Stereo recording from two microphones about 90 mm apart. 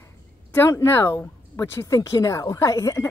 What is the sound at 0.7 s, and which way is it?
Speech, 30° left (ahead or behind).